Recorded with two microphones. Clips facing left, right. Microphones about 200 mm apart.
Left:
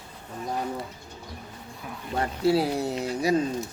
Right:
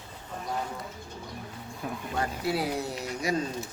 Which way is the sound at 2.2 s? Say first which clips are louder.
Left 7 dB; 30° left (ahead or behind).